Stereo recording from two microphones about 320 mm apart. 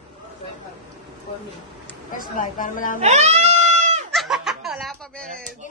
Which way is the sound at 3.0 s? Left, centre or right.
Right.